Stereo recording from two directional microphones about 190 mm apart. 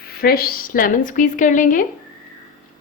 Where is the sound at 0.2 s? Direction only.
50° left (ahead or behind).